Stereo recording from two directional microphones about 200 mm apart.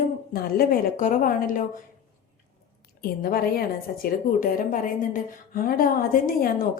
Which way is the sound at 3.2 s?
50° left (ahead or behind).